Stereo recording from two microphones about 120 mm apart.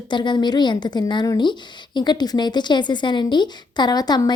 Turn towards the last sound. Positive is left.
turn(degrees=35)  # may be behind; listen again after turning